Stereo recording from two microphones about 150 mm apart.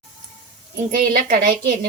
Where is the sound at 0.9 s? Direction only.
65° right (ahead or behind).